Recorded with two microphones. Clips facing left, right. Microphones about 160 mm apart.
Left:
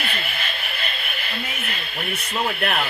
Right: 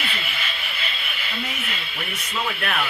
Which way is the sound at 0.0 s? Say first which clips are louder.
Left 2 dB; 50° left (ahead or behind).